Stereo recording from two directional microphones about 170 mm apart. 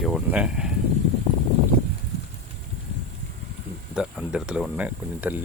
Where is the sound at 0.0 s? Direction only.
5° right (ahead or behind).